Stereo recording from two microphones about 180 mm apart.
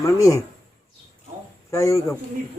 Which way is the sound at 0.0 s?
15° left (ahead or behind).